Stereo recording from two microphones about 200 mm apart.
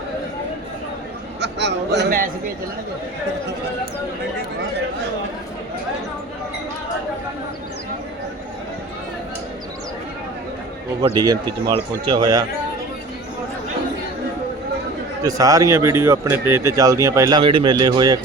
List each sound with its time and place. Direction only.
1.4 s a man's voice: 60° right (ahead or behind)
11.0 s speech: 20° right (ahead or behind)
15.2 s speech: 15° right (ahead or behind)